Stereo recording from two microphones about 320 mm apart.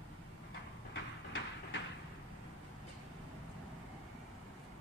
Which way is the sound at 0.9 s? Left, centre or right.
Left.